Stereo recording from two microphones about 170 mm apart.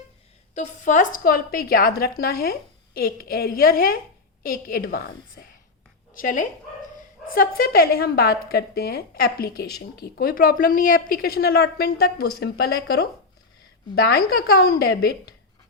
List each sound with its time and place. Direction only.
0.5 s a woman's voice: 45° left (ahead or behind); by 15.4 s 70° left (ahead or behind)